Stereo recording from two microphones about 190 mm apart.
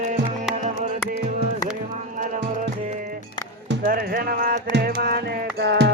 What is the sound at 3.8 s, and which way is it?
Music, 50° right (ahead or behind).